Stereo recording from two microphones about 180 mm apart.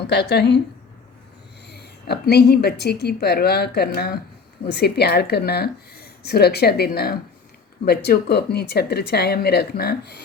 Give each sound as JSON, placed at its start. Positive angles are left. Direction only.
{"t": 0.1, "sound": "a woman's voice", "side_deg": 70}
{"t": 1.6, "sound": "speech", "side_deg": 65}